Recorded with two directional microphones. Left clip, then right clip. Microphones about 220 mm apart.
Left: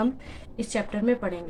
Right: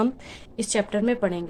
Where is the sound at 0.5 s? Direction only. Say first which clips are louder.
Right 5 dB; 55° right (ahead or behind).